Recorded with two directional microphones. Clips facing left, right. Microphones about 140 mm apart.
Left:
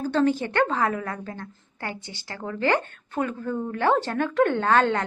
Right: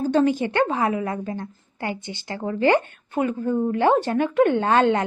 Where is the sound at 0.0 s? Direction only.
15° right (ahead or behind).